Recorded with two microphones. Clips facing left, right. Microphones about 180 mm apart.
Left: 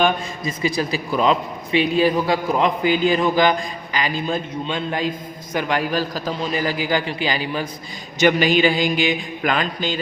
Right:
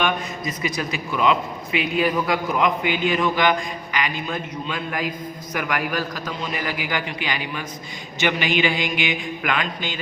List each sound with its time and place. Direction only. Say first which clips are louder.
0.0 s a man's voice: left 4 dB; 30° left (ahead or behind)